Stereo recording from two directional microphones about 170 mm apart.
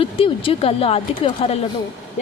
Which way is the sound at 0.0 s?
35° left (ahead or behind).